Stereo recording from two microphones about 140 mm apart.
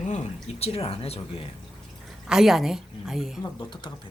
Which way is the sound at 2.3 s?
Centre (ahead or behind).